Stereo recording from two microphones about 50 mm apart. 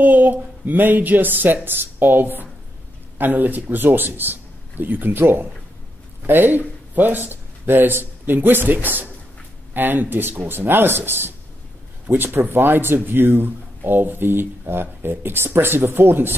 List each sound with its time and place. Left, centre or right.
0.0 s a woman's voice: right
6.2 s speech: right